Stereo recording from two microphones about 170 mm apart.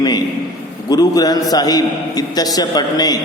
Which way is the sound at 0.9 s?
20° left (ahead or behind).